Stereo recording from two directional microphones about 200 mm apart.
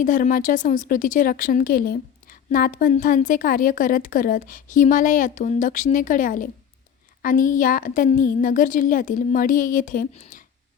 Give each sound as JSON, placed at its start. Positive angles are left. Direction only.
{"t": 0.0, "sound": "a woman's voice", "side_deg": 40}